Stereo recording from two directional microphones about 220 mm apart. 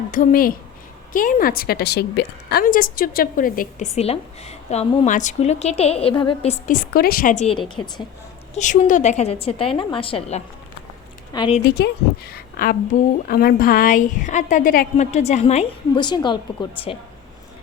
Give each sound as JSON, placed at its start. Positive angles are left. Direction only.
{"t": 0.1, "sound": "a woman's voice", "side_deg": 40}
{"t": 7.6, "sound": "a woman's voice", "side_deg": 20}
{"t": 8.5, "sound": "a woman's voice", "side_deg": 35}
{"t": 11.8, "sound": "a woman's voice", "side_deg": 45}